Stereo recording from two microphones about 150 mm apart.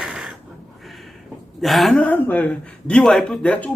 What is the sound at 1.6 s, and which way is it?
A man's voice, centre (ahead or behind).